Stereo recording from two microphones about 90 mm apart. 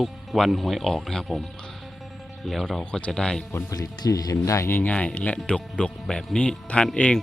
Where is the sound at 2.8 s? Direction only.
10° left (ahead or behind).